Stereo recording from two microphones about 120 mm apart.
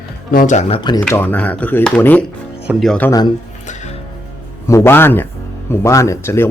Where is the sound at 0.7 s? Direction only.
40° left (ahead or behind).